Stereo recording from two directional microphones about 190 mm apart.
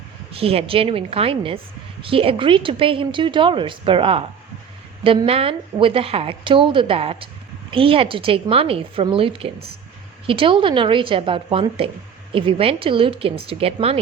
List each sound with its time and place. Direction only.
0.3 s speech: 30° right (ahead or behind)